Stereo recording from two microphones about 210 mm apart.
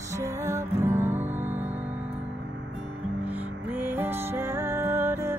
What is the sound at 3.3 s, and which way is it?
Music, 10° right (ahead or behind).